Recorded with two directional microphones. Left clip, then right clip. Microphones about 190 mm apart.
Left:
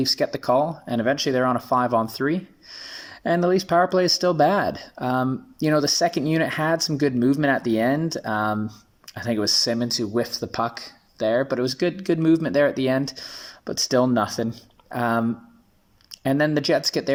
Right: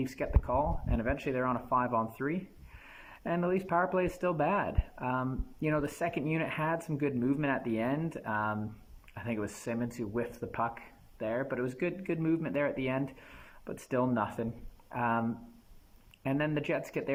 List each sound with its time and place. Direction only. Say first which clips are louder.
0.0 s speech: left 14 dB; 30° left (ahead or behind)